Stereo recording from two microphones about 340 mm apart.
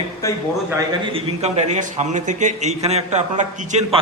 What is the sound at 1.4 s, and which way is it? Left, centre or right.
A man's voice, centre.